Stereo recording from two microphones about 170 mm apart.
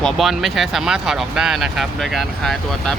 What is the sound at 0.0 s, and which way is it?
Speech, centre (ahead or behind).